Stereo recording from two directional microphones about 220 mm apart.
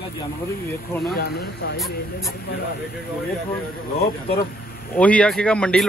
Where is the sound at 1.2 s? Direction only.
45° left (ahead or behind).